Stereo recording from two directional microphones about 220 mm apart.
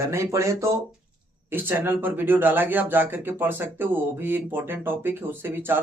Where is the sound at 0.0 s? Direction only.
10° right (ahead or behind).